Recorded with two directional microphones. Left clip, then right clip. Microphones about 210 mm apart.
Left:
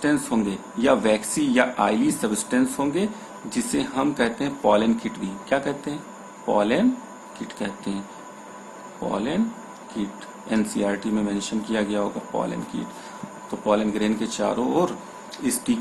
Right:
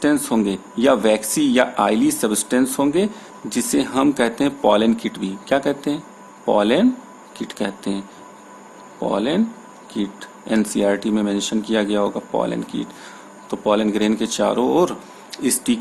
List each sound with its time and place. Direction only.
0.0 s speech: 45° right (ahead or behind)
9.0 s speech: 45° right (ahead or behind)